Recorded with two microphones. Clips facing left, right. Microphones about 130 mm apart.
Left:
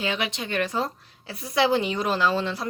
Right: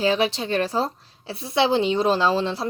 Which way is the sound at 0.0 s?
35° right (ahead or behind).